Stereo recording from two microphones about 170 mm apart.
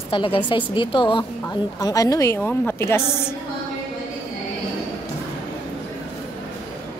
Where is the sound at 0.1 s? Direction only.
30° left (ahead or behind); by 3.3 s 15° left (ahead or behind).